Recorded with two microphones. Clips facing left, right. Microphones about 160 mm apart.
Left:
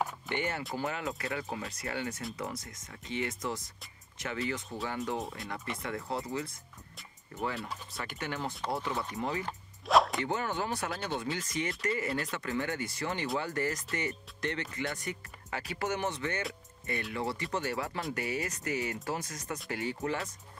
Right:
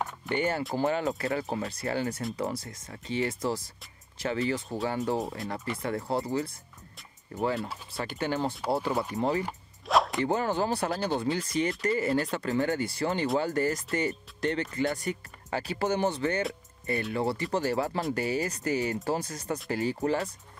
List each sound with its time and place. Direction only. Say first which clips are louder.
0.3 s speech: right 6 dB; 35° right (ahead or behind)
7.9 s speech: right 9 dB; 30° right (ahead or behind)
9.4 s music: right 4 dB; 5° right (ahead or behind)
10.2 s speech: right 6 dB; 35° right (ahead or behind)